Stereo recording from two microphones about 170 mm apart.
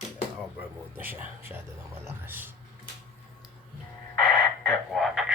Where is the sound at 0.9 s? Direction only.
10° right (ahead or behind).